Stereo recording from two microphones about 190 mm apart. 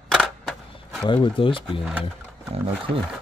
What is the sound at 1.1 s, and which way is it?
Speech, 25° left (ahead or behind).